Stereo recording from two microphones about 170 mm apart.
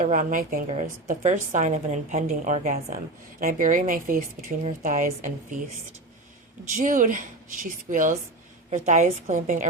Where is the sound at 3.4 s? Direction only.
55° right (ahead or behind).